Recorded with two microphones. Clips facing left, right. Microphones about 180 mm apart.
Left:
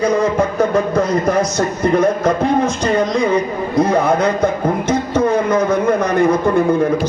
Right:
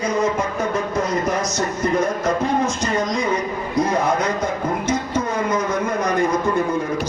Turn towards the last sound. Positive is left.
turn(degrees=60)  # may be behind; listen again after turning